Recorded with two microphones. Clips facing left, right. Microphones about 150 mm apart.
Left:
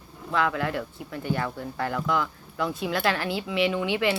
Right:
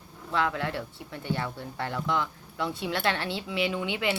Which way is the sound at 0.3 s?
30° right (ahead or behind).